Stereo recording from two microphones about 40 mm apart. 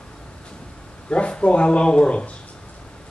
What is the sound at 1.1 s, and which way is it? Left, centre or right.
A man's voice, left.